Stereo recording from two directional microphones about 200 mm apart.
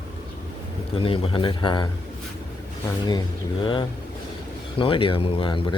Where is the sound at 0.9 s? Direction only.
25° left (ahead or behind).